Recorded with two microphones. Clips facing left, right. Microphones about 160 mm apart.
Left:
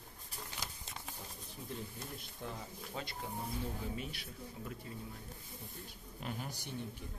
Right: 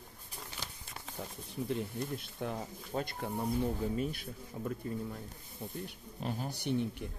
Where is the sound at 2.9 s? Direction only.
50° right (ahead or behind).